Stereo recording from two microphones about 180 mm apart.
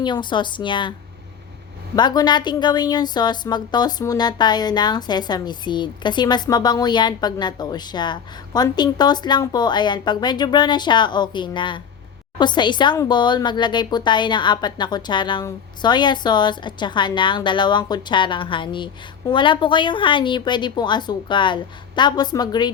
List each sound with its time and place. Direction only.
0.0 s a woman's voice: 25° left (ahead or behind)
2.0 s a woman's voice: 25° left (ahead or behind)